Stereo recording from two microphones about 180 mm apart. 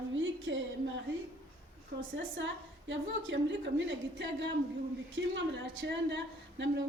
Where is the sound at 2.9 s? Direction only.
90° right.